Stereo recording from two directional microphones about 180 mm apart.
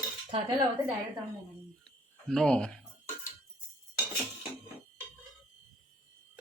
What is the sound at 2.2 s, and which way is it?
Speech, 5° left (ahead or behind).